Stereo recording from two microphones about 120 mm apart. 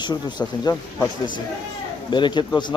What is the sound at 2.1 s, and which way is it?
Speech, 40° left (ahead or behind).